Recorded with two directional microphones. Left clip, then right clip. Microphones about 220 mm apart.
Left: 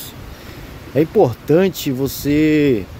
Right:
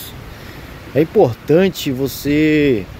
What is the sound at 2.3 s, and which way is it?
Speech, 5° left (ahead or behind).